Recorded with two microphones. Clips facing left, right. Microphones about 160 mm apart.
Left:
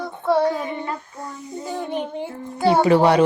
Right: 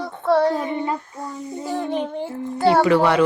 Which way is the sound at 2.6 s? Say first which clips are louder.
Right 1 dB; 20° left (ahead or behind).